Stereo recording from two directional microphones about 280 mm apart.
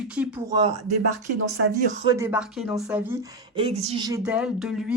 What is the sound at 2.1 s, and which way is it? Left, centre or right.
Speech, centre.